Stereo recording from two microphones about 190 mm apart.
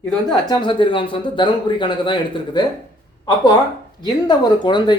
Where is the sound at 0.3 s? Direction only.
25° left (ahead or behind).